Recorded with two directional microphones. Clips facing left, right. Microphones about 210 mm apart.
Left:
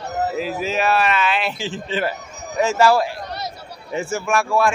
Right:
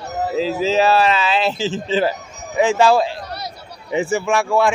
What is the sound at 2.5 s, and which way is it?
Speech, 15° right (ahead or behind).